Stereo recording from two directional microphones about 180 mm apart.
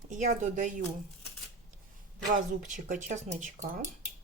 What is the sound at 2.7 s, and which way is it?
Speech, 45° right (ahead or behind).